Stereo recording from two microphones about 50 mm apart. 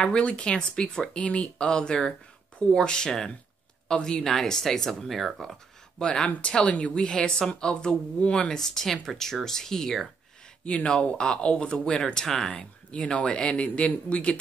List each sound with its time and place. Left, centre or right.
0.0 s speech: centre
5.9 s speech: centre
8.5 s speech: centre
10.6 s speech: left
12.9 s speech: left